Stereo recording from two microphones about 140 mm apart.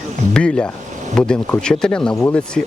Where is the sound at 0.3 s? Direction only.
5° left (ahead or behind).